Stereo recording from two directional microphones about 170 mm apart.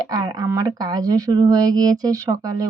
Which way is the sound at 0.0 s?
20° right (ahead or behind).